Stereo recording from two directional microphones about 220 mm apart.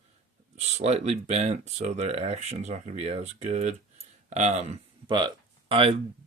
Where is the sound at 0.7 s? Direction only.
30° right (ahead or behind).